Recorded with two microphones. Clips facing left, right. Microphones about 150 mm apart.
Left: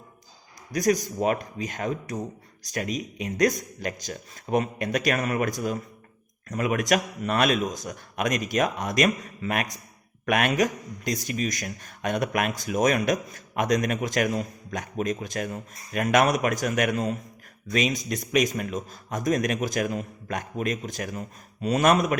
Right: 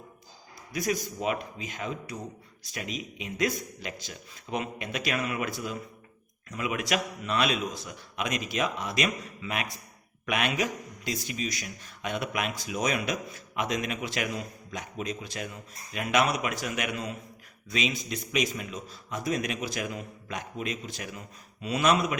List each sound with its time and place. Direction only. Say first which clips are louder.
0.7 s a man's voice: left 7 dB; 45° left (ahead or behind)